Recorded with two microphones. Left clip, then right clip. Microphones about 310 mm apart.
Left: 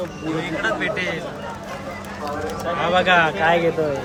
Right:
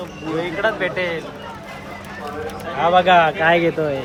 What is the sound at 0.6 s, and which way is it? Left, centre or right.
Speech, centre.